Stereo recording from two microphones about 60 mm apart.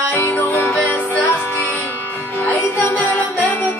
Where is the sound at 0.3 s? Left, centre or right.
Left.